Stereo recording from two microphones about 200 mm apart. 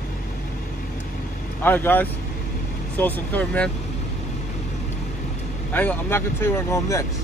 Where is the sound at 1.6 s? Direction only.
10° left (ahead or behind).